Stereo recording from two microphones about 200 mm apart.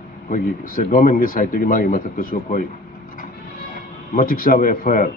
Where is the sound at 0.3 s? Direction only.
45° left (ahead or behind).